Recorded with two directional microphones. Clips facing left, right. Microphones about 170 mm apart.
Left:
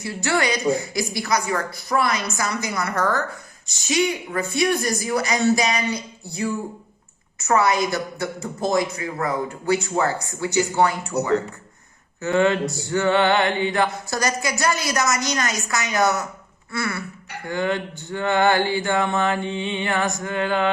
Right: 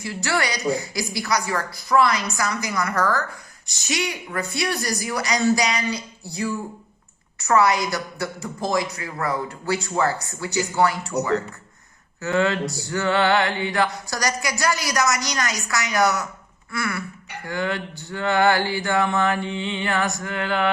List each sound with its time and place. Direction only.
0.0 s speech: 25° left (ahead or behind)